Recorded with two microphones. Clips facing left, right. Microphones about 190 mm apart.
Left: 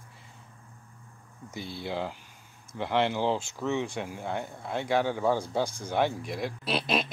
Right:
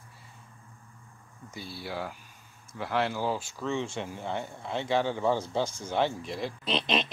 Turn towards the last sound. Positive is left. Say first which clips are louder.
# even
turn(degrees=5)  # may be behind; listen again after turning